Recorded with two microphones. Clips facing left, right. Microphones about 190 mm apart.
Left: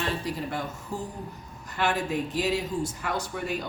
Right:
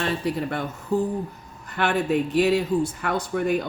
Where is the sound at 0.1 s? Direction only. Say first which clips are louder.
Right 5 dB; 60° right (ahead or behind).